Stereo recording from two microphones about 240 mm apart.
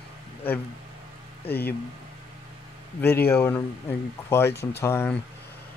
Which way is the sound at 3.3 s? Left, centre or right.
Centre.